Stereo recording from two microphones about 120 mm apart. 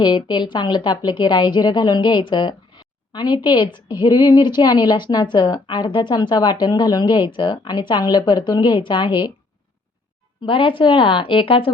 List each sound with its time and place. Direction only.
0.0 s a woman's voice: 35° left (ahead or behind)
10.4 s a woman's voice: 45° left (ahead or behind)